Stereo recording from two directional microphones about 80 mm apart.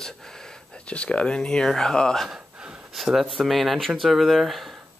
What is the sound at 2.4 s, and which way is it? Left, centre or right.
Gasp, centre.